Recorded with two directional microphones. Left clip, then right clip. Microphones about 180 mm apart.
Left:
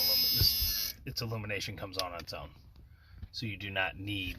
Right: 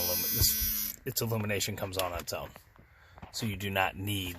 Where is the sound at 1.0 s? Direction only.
75° right (ahead or behind).